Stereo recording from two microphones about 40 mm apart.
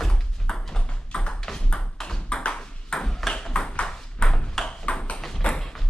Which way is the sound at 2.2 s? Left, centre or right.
Left.